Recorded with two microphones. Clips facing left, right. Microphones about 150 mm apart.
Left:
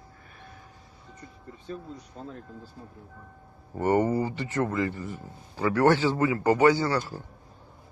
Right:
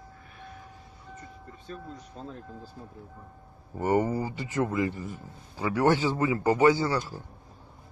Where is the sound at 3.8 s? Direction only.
10° right (ahead or behind).